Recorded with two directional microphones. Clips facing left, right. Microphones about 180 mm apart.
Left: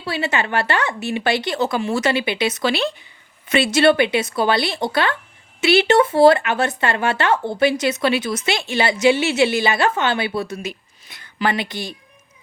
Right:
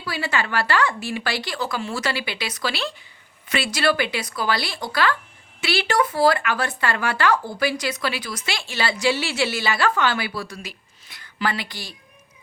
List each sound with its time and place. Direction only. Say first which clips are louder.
0.0 s speech: left 4 dB; 25° left (ahead or behind)